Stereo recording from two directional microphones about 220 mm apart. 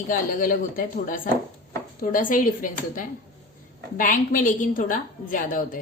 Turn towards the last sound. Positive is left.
turn(degrees=40)  # may be behind; listen again after turning